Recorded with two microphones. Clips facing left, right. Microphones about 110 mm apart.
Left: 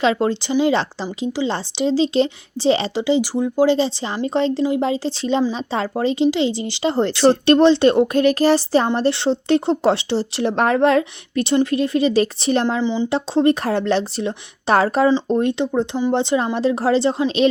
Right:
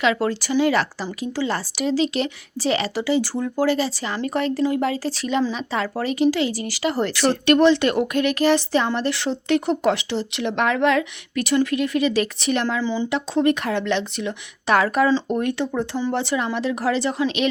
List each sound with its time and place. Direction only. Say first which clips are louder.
0.0 s a woman's voice: left 3 dB; 30° left (ahead or behind)
12.6 s a woman's voice: left 3 dB; 20° left (ahead or behind)
13.1 s a woman's voice: left 3 dB; 30° left (ahead or behind)